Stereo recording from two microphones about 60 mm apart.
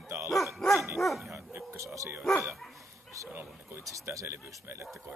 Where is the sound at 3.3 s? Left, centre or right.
Right.